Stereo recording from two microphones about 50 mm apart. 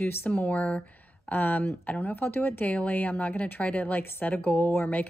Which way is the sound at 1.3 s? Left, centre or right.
Left.